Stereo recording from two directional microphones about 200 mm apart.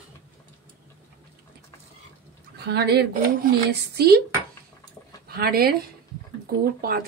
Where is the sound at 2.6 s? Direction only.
55° right (ahead or behind).